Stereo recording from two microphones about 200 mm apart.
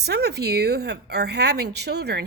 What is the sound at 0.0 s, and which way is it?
Speech, 55° right (ahead or behind).